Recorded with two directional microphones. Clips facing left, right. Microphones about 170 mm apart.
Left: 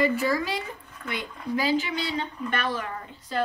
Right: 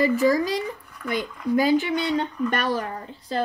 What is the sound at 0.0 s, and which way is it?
A woman's voice, 40° right (ahead or behind).